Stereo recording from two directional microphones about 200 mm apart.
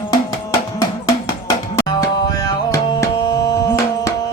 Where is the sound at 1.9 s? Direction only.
20° left (ahead or behind).